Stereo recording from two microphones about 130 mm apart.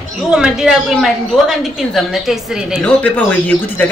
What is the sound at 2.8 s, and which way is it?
A man's voice, 10° left (ahead or behind).